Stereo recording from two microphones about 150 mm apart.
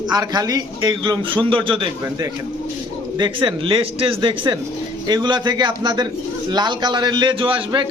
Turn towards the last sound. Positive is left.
turn(degrees=-35)  # may be behind; listen again after turning